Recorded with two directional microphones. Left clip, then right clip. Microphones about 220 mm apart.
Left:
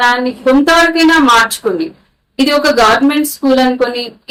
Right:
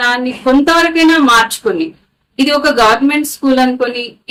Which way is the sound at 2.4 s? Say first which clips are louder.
Left 1 dB; 15° right (ahead or behind).